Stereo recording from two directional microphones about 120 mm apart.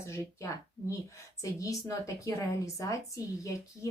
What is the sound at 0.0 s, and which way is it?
Speech, 20° left (ahead or behind).